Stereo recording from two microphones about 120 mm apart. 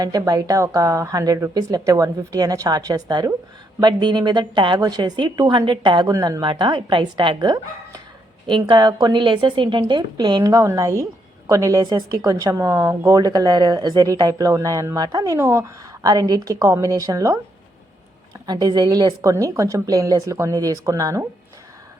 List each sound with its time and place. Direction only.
0.0 s a woman's voice: 30° right (ahead or behind)
6.1 s a woman's voice: 25° right (ahead or behind)
6.4 s a woman's voice: 40° right (ahead or behind)
18.4 s a woman's voice: 35° right (ahead or behind)